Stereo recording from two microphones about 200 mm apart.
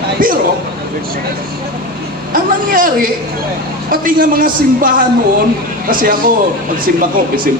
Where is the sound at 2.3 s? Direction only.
45° right (ahead or behind).